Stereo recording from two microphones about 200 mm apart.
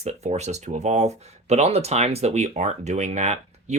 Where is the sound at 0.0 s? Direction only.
35° right (ahead or behind).